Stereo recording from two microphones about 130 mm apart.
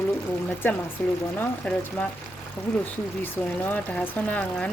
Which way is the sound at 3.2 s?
15° left (ahead or behind).